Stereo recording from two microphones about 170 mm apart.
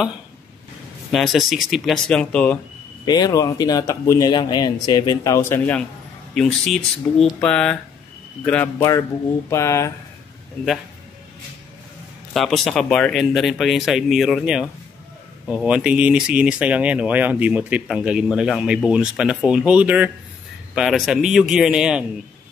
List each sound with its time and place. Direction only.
1.1 s speech: centre (ahead or behind)
3.1 s speech: 20° left (ahead or behind)
12.4 s speech: centre (ahead or behind)